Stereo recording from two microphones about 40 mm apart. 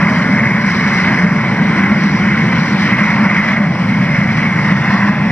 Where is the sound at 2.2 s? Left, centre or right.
Left.